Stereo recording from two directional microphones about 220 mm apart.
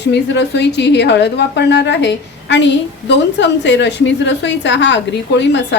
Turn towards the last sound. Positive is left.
turn(degrees=55)  # may be behind; listen again after turning